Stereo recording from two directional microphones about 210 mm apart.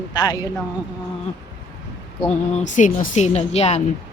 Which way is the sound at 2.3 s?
35° left (ahead or behind).